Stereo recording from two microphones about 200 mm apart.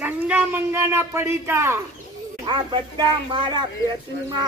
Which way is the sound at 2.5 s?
25° right (ahead or behind).